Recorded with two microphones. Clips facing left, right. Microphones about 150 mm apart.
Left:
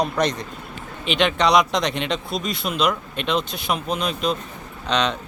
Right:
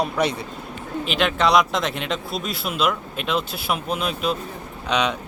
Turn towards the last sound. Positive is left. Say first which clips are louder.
# even
turn(degrees=-10)  # may be behind; listen again after turning